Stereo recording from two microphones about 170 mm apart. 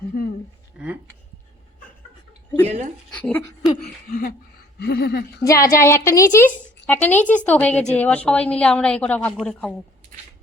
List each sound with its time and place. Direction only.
2.6 s speech: 40° right (ahead or behind)
3.1 s speech: 5° left (ahead or behind)
4.1 s speech: 55° left (ahead or behind)
4.8 s speech: 70° left (ahead or behind)
5.4 s a woman's voice: 20° left (ahead or behind)